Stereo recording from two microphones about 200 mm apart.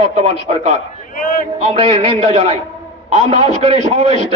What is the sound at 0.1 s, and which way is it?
Speech, 35° right (ahead or behind).